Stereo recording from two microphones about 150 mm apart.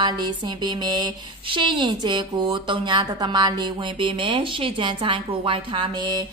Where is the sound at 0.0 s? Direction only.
30° right (ahead or behind).